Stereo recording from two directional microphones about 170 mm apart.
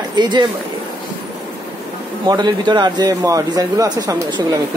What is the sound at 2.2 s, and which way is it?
A man's voice, 25° right (ahead or behind).